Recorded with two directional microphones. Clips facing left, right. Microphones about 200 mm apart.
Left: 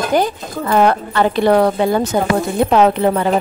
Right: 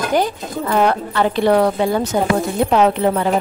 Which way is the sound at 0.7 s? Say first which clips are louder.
Left 3 dB; 55° left (ahead or behind).